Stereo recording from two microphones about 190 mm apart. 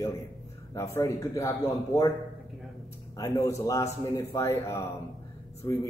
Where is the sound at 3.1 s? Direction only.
20° left (ahead or behind).